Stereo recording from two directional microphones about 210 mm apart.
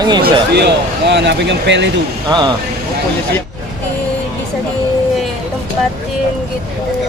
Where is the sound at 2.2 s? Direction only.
20° right (ahead or behind).